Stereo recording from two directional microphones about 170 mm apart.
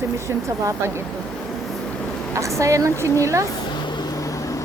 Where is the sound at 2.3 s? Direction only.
20° right (ahead or behind).